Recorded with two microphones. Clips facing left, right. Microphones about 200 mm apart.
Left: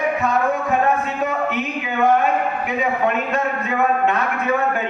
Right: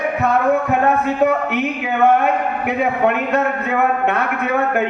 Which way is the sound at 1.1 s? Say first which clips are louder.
Right 6 dB; 65° right (ahead or behind).